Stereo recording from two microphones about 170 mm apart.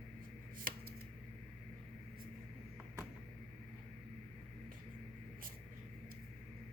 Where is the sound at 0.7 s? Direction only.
55° right (ahead or behind).